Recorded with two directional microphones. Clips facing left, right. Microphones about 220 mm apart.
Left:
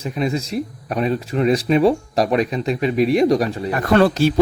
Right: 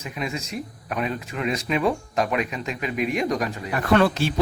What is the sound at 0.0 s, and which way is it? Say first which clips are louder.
Speech: left 8 dB; 35° left (ahead or behind).